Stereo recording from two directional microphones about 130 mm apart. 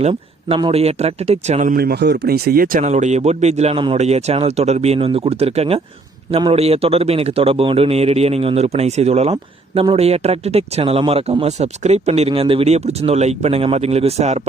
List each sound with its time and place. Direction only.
0.0 s speech: 50° right (ahead or behind)